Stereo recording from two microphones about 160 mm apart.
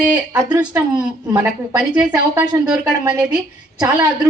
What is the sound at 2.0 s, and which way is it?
A woman's voice, 25° right (ahead or behind).